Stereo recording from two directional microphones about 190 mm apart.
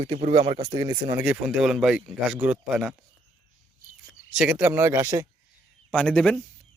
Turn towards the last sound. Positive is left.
turn(degrees=5)  # may be behind; listen again after turning